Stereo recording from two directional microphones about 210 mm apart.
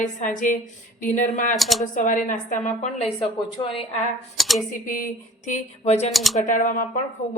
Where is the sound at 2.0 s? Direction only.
40° left (ahead or behind).